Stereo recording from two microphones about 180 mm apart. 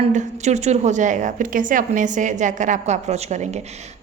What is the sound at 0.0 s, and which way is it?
A woman's voice, 40° right (ahead or behind).